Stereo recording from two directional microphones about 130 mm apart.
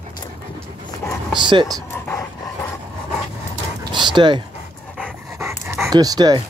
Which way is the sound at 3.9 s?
35° right (ahead or behind).